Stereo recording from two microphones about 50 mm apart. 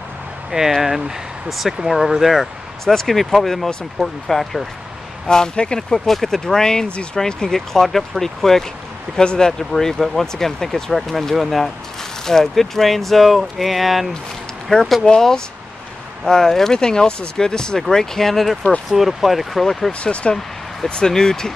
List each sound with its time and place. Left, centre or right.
0.5 s speech: centre
2.8 s speech: centre
9.5 s speech: centre
14.7 s speech: centre
19.9 s speech: left